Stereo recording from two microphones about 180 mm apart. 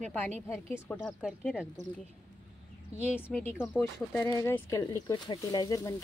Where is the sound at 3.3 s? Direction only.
10° left (ahead or behind).